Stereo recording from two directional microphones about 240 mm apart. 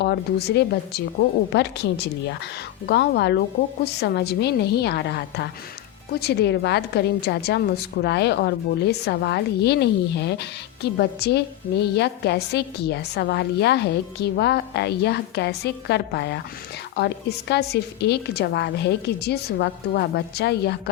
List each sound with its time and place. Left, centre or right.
0.0 s a woman's voice: left